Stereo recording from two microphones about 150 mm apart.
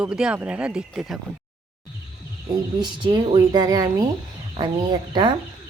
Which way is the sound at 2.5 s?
30° right (ahead or behind).